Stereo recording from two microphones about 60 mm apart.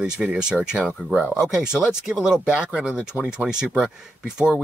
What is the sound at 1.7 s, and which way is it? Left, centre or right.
Speech, centre.